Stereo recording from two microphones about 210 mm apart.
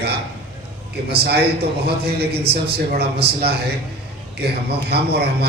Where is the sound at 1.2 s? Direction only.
50° right (ahead or behind).